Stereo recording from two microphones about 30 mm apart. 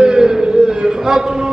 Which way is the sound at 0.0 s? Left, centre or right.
Right.